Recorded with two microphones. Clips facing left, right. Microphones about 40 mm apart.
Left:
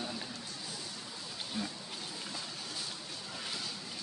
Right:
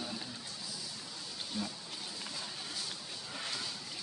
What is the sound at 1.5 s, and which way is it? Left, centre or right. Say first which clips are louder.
Speech: even; left.